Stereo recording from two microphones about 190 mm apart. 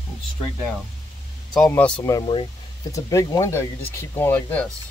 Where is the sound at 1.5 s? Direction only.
5° left (ahead or behind).